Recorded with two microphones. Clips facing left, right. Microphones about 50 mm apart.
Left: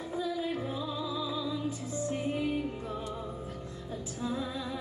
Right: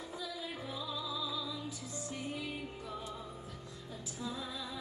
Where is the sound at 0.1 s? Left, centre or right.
Left.